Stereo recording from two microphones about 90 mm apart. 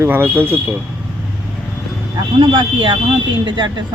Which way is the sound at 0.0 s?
25° right (ahead or behind).